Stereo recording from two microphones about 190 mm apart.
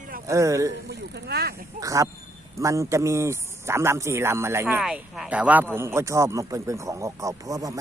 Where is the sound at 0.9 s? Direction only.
60° right (ahead or behind).